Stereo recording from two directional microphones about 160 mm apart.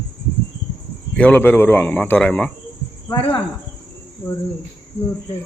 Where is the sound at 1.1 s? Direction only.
10° left (ahead or behind).